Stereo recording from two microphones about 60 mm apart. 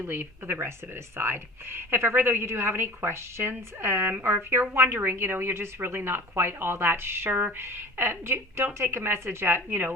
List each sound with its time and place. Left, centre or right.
0.0 s a woman's voice: right
9.6 s a woman's voice: right